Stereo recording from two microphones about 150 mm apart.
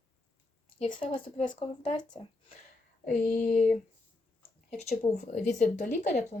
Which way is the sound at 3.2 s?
10° left (ahead or behind).